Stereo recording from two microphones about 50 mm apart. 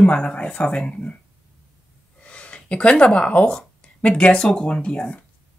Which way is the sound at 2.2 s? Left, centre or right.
Left.